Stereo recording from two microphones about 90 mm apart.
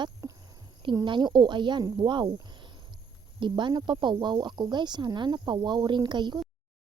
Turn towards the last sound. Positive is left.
turn(degrees=-55)  # may be behind; listen again after turning